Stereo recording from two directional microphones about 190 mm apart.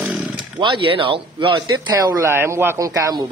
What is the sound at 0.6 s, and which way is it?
Speech, 25° right (ahead or behind).